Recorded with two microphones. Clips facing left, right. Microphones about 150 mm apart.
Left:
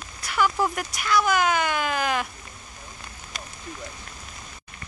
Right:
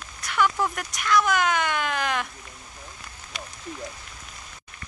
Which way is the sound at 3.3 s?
45° left (ahead or behind).